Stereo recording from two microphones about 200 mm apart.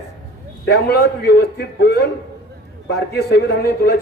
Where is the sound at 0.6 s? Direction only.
55° left (ahead or behind).